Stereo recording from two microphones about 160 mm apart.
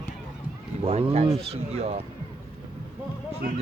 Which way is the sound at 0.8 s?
40° right (ahead or behind).